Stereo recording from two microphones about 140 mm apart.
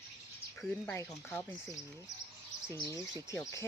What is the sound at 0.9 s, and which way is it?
Speech, 15° left (ahead or behind).